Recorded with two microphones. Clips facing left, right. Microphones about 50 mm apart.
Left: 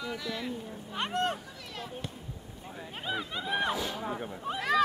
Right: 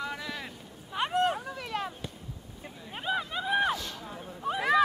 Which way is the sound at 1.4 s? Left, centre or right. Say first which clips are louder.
Right 8 dB; right.